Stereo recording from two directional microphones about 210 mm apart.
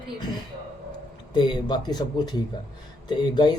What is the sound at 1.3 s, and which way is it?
A man's voice, 20° left (ahead or behind).